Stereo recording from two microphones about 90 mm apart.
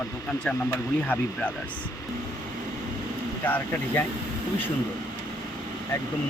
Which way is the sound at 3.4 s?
20° left (ahead or behind).